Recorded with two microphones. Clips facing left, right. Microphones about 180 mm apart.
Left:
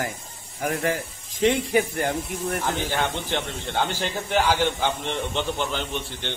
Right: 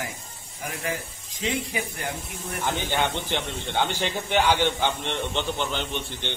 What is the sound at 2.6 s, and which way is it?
A man's voice, centre (ahead or behind).